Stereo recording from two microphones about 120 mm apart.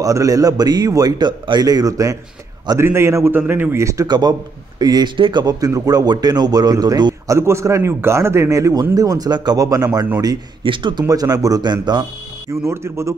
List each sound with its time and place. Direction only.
0.0 s a man's voice: 30° right (ahead or behind)
10.6 s a man's voice: 45° right (ahead or behind)
12.6 s a man's voice: 25° right (ahead or behind)